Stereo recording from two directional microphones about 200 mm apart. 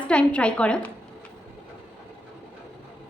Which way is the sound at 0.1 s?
5° left (ahead or behind).